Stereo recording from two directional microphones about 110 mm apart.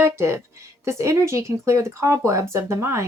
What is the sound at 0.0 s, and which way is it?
Speech, 25° right (ahead or behind).